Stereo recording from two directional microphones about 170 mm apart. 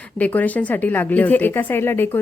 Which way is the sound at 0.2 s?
10° left (ahead or behind).